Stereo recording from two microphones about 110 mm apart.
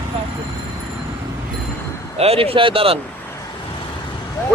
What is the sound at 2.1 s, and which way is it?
Speech, 65° right (ahead or behind).